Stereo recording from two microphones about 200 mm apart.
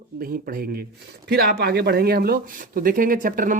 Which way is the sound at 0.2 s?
45° right (ahead or behind).